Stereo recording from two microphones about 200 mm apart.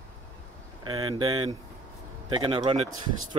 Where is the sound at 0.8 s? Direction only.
20° right (ahead or behind).